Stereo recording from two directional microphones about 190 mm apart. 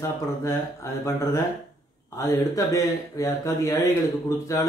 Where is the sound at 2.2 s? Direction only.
15° left (ahead or behind).